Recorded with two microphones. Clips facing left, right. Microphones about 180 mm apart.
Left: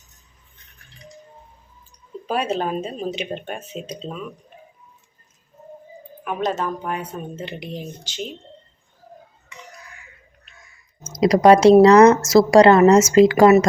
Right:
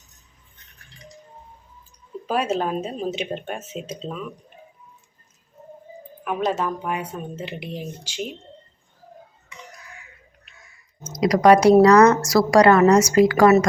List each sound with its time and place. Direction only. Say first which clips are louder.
2.2 s speech: even; centre (ahead or behind)
6.2 s a woman's voice: even; 5° right (ahead or behind)
11.0 s speech: left 2 dB; 25° left (ahead or behind)